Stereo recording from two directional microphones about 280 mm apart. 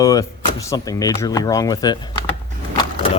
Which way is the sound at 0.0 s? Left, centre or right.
Centre.